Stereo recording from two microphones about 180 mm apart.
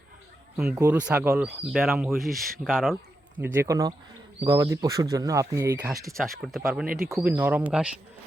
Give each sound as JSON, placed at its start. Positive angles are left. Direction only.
{"t": 0.5, "sound": "speech", "side_deg": -5}
{"t": 3.3, "sound": "speech", "side_deg": -10}
{"t": 6.1, "sound": "speech", "side_deg": 0}
{"t": 6.8, "sound": "speech", "side_deg": -55}
{"t": 7.1, "sound": "speech", "side_deg": -5}